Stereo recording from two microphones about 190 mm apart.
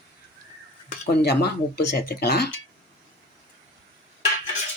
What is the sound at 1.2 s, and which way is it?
Speech, 55° left (ahead or behind).